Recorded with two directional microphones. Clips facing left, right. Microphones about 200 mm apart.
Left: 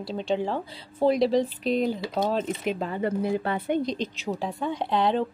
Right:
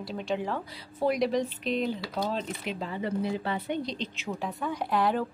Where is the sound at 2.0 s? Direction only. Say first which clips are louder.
Left 5 dB; 20° left (ahead or behind).